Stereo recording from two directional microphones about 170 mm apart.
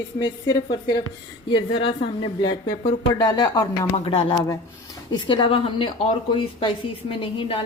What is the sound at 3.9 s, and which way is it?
Speech, 35° left (ahead or behind).